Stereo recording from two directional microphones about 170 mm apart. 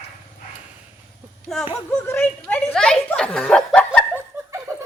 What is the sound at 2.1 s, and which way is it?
Speech, 10° left (ahead or behind).